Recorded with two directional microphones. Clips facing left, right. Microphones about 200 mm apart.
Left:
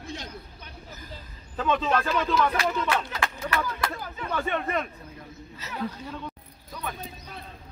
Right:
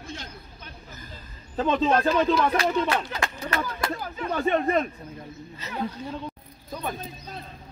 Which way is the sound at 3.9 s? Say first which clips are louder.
Right 3 dB; 40° right (ahead or behind).